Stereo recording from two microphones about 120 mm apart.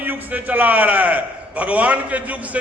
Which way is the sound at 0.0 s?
15° right (ahead or behind).